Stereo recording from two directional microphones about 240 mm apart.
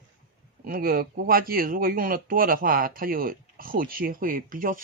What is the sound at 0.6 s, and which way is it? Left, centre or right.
Speech, right.